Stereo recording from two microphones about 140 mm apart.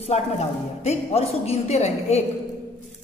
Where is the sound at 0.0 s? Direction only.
50° left (ahead or behind).